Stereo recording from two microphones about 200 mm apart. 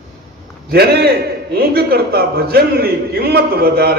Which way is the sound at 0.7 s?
55° right (ahead or behind).